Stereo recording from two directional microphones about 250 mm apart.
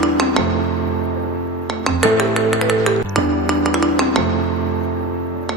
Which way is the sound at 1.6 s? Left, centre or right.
Centre.